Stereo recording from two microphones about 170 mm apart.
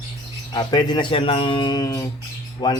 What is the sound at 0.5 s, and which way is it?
Speech, 25° left (ahead or behind).